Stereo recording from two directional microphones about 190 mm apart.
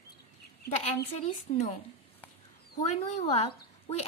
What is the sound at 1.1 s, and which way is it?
Speech, 35° left (ahead or behind).